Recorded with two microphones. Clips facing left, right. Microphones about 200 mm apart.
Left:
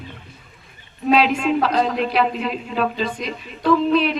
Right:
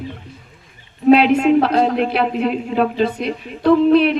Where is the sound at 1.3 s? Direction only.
60° right (ahead or behind).